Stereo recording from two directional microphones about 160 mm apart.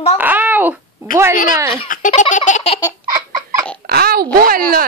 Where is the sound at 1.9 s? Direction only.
50° left (ahead or behind).